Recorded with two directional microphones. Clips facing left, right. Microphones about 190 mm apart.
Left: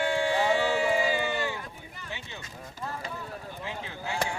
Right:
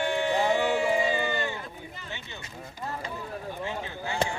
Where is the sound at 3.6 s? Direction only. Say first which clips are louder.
Left 1 dB; centre (ahead or behind).